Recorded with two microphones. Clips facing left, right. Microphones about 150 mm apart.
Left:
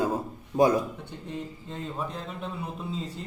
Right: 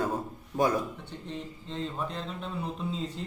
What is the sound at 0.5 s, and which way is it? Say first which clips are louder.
Speech: left 5 dB; 25° left (ahead or behind).